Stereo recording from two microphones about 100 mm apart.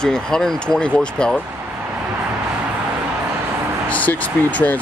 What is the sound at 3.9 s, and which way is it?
Speech, 15° left (ahead or behind).